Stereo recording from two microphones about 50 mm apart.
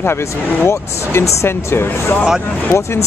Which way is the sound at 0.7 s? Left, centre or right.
Left.